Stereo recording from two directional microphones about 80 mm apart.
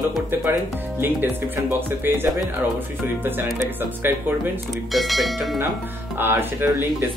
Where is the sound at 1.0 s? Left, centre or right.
Right.